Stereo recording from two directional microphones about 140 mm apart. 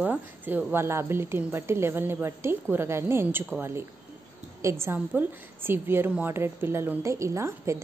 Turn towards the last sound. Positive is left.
turn(degrees=-20)  # may be behind; listen again after turning